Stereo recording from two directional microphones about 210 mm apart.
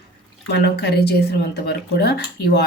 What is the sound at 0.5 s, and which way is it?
Speech, 50° left (ahead or behind).